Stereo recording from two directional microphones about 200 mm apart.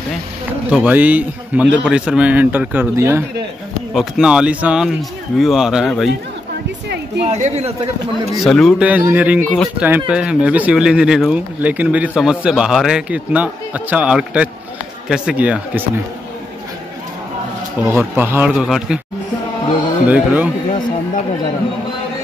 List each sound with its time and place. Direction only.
0.7 s speech: 5° right (ahead or behind)
7.2 s speech: 30° right (ahead or behind)
8.4 s speech: centre (ahead or behind)
17.8 s speech: 10° right (ahead or behind)
20.1 s speech: 5° right (ahead or behind)